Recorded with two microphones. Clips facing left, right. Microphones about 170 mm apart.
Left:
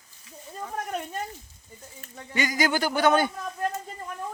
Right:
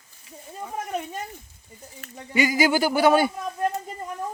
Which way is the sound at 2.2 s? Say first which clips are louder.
Right 5 dB; 10° right (ahead or behind).